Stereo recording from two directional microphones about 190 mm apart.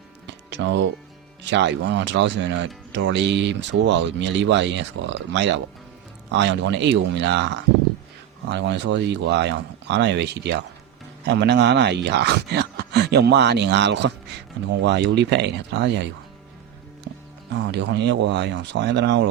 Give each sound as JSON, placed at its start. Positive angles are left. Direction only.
{"t": 0.3, "sound": "music", "side_deg": -70}
{"t": 1.5, "sound": "speech", "side_deg": -70}
{"t": 17.5, "sound": "speech", "side_deg": -60}